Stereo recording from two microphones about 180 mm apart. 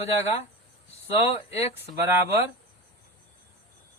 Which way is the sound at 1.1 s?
35° left (ahead or behind).